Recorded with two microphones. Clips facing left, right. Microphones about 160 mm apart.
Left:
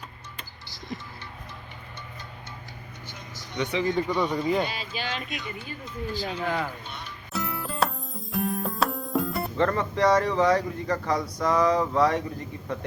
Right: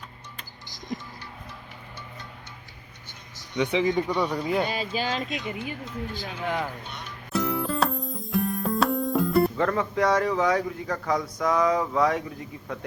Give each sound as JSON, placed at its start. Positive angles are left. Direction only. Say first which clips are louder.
{"t": 3.6, "sound": "speech", "louder": "right 2 dB", "side_deg": -15}
{"t": 4.6, "sound": "speech", "louder": "right 4 dB", "side_deg": -45}
{"t": 5.5, "sound": "speech", "louder": "right 5 dB", "side_deg": -90}
{"t": 6.1, "sound": "speech", "louder": "left 2 dB", "side_deg": -15}
{"t": 7.3, "sound": "music", "louder": "right 3 dB", "side_deg": 0}